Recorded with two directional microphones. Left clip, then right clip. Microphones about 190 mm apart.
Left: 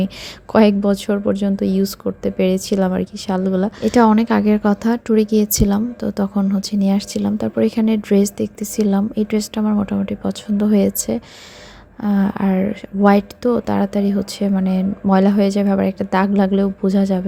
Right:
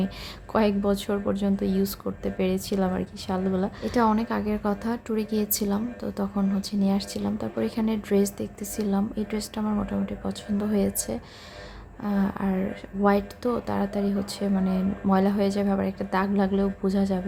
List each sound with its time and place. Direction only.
0.5 s speech: 35° left (ahead or behind)